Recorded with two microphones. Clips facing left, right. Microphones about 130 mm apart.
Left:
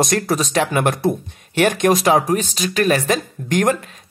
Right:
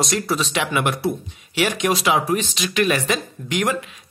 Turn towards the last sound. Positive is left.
turn(degrees=45)  # may be behind; listen again after turning